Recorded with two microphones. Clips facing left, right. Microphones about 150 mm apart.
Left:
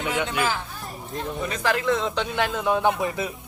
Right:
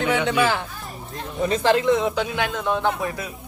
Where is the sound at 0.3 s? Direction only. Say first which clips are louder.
Right 5 dB; 75° right (ahead or behind).